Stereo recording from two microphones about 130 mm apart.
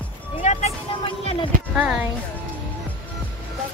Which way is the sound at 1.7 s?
10° right (ahead or behind).